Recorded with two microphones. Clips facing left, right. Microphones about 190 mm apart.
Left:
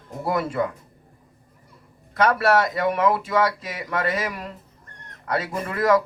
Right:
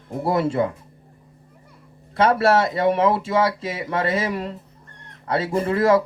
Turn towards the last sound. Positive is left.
turn(degrees=-30)  # may be behind; listen again after turning